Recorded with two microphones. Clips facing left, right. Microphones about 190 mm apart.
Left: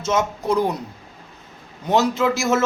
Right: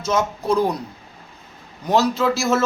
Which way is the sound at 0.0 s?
20° left (ahead or behind).